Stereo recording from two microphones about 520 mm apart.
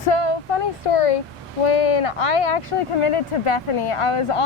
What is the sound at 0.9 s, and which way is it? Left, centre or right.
Speech, left.